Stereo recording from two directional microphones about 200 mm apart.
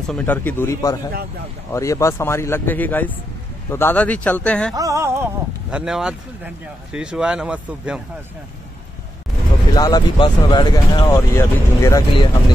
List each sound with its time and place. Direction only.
0.1 s speech: 10° left (ahead or behind)
4.7 s speech: 15° right (ahead or behind)
9.8 s speech: 20° left (ahead or behind)
11.1 s speech: 10° left (ahead or behind)